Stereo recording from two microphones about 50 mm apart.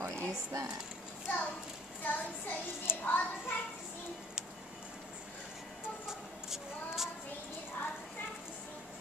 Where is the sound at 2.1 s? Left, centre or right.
Left.